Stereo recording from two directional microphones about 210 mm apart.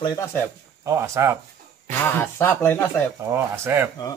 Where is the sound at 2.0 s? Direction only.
10° left (ahead or behind).